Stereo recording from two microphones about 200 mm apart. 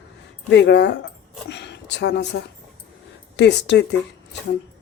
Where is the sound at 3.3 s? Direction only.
60° left (ahead or behind).